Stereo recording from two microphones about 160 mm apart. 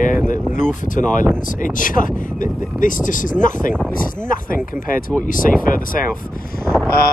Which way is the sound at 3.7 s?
5° left (ahead or behind).